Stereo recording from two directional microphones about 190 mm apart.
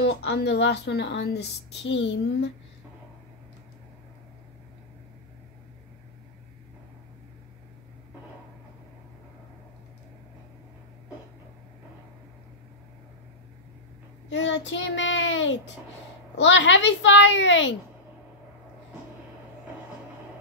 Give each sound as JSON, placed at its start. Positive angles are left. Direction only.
{"t": 0.0, "sound": "a woman's voice", "side_deg": 65}
{"t": 14.3, "sound": "child singing", "side_deg": 70}
{"t": 16.3, "sound": "a child's voice", "side_deg": 75}